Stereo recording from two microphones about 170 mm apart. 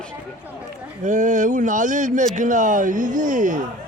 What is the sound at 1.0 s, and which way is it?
Speech, 45° right (ahead or behind).